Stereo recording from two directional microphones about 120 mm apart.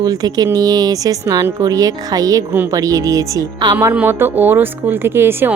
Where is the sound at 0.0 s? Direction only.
30° right (ahead or behind).